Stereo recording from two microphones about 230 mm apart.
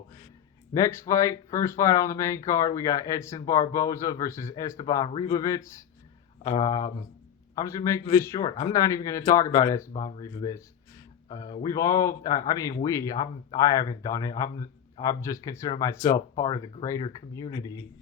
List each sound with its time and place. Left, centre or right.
0.7 s a man's voice: centre